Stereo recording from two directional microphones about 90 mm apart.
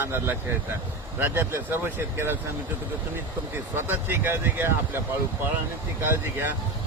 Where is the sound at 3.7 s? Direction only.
25° right (ahead or behind).